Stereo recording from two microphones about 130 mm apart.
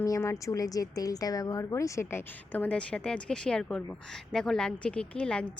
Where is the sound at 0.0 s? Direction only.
20° left (ahead or behind).